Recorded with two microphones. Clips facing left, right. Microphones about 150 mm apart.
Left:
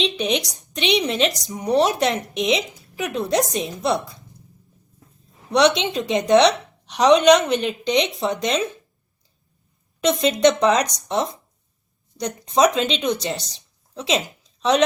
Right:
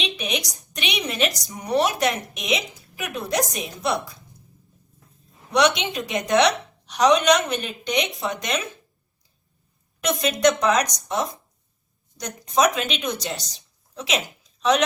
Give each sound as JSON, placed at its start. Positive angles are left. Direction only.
{"t": 0.0, "sound": "a woman's voice", "side_deg": 30}
{"t": 5.5, "sound": "a woman's voice", "side_deg": 30}
{"t": 10.0, "sound": "a woman's voice", "side_deg": 25}